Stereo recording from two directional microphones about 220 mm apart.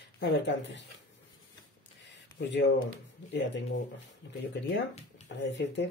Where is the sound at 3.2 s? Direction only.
50° left (ahead or behind).